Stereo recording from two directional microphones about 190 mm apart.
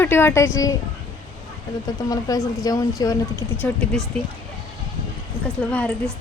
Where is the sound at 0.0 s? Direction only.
10° left (ahead or behind).